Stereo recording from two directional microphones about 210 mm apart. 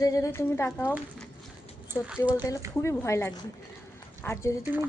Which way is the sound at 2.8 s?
15° left (ahead or behind).